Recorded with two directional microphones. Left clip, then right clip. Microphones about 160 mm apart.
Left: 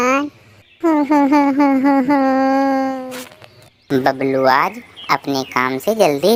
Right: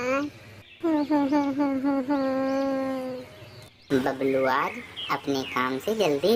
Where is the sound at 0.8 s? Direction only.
30° left (ahead or behind).